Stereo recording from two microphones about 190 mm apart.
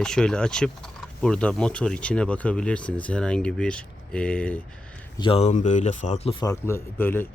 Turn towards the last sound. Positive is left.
turn(degrees=10)  # may be behind; listen again after turning